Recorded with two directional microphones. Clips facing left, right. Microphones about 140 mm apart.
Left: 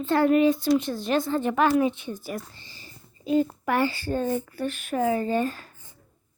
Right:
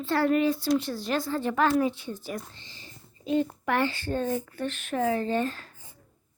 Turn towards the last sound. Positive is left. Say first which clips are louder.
# left 2 dB
turn(degrees=10)  # may be behind; listen again after turning